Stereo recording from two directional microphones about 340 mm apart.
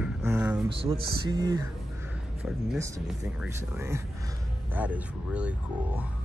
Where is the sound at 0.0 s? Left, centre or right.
Centre.